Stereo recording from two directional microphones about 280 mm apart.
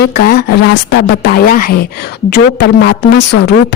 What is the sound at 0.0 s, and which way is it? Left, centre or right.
Speech, left.